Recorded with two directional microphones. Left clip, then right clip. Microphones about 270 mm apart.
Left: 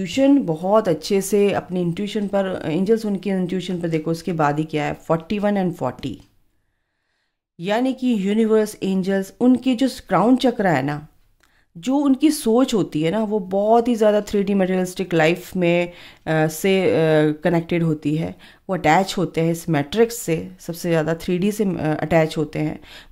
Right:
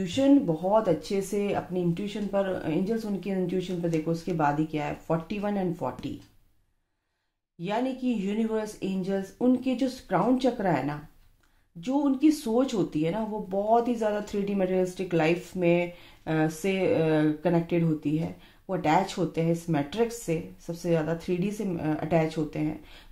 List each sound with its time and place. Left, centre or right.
0.0 s speech: left
7.6 s speech: left